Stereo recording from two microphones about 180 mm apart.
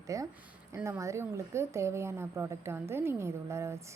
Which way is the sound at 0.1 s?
15° right (ahead or behind).